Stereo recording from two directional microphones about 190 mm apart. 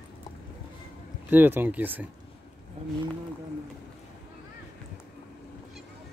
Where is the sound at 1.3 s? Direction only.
10° right (ahead or behind).